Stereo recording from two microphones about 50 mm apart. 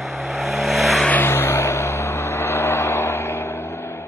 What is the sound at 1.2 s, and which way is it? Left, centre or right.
Vehicle, left.